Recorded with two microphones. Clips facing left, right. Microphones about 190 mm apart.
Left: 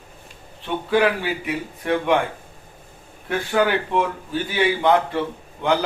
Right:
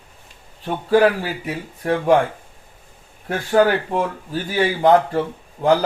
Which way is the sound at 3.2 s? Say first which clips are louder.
Right 4 dB; 40° right (ahead or behind).